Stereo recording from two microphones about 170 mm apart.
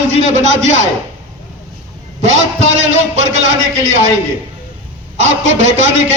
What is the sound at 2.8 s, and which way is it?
Speech, 40° right (ahead or behind).